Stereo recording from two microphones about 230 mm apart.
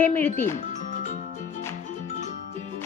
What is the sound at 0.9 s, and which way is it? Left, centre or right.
Music, left.